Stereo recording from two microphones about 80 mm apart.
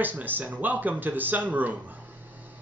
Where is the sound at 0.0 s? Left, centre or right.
Right.